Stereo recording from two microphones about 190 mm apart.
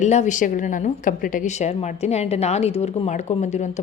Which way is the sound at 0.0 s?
40° left (ahead or behind).